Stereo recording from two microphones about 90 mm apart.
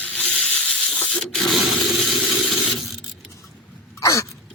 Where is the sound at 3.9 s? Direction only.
35° left (ahead or behind).